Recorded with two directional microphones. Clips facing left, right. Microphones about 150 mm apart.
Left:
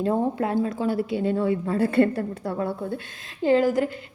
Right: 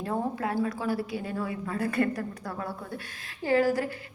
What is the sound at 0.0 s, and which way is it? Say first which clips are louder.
A woman's voice: left 7 dB; 25° left (ahead or behind).